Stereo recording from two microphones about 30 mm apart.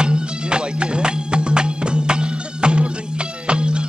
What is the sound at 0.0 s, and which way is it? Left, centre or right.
Music, right.